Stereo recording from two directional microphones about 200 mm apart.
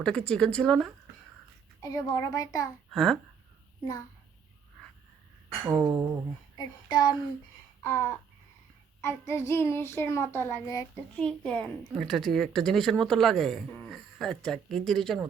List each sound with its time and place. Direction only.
0.0 s speech: 5° left (ahead or behind)
1.8 s child singing: 15° left (ahead or behind)
2.9 s speech: centre (ahead or behind)
5.6 s a sound: 15° right (ahead or behind)
6.6 s a sound: 20° left (ahead or behind)
9.0 s child singing: 15° left (ahead or behind)
11.1 s speech: 5° left (ahead or behind)